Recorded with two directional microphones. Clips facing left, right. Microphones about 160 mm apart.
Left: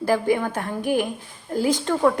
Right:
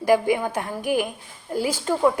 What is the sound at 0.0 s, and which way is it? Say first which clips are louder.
A woman's voice: right 1 dB; 15° right (ahead or behind).